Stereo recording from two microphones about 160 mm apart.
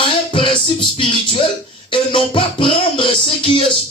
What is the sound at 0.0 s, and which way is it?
Music, 35° left (ahead or behind).